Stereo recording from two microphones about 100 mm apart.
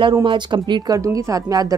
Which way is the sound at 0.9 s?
35° right (ahead or behind).